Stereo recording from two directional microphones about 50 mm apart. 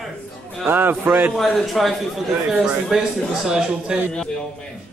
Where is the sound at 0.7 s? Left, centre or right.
Right.